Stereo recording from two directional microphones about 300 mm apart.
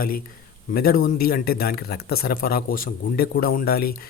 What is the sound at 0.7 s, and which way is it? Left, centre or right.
A man's voice, left.